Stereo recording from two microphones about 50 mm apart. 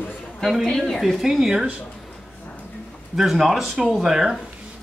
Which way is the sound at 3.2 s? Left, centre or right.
Centre.